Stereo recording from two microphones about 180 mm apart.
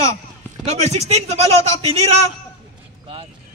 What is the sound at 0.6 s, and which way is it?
Speech, 35° right (ahead or behind).